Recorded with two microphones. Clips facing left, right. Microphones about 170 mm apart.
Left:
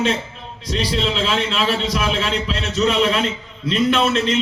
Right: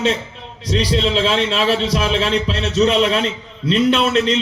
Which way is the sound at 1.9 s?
30° right (ahead or behind).